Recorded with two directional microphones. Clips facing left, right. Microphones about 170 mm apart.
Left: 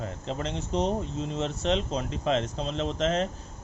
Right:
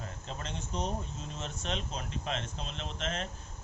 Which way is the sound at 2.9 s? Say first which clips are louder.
Left 10 dB; 35° left (ahead or behind).